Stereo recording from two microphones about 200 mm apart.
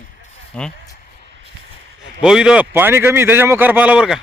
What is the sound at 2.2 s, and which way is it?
A man's voice, 5° right (ahead or behind).